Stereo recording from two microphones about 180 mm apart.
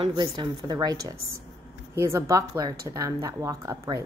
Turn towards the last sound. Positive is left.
turn(degrees=-15)  # may be behind; listen again after turning